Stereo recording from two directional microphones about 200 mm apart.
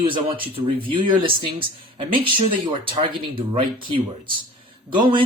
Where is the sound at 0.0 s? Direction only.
25° right (ahead or behind).